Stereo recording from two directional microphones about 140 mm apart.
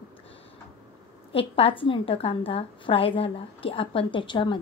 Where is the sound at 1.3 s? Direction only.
40° left (ahead or behind).